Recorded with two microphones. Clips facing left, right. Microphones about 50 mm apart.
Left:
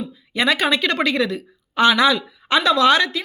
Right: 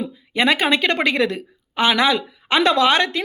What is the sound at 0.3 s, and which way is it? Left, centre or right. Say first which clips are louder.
A woman's voice: right 1 dB; right.